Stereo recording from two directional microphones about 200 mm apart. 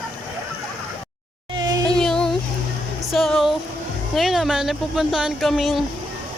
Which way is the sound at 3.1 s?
Centre (ahead or behind).